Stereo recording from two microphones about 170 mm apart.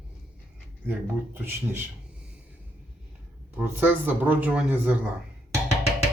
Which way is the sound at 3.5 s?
10° right (ahead or behind).